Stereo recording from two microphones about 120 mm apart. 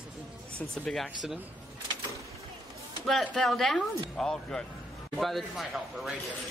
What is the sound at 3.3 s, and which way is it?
Speech, 5° left (ahead or behind).